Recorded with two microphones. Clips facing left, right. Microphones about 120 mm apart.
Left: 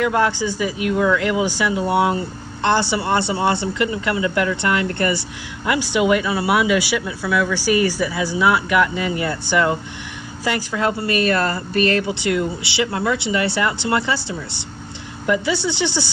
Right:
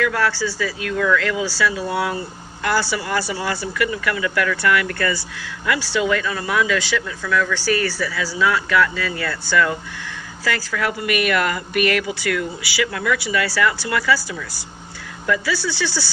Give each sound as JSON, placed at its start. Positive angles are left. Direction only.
{"t": 0.0, "sound": "speech", "side_deg": 20}